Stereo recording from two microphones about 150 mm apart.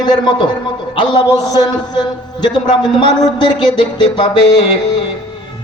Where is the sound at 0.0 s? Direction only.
30° left (ahead or behind).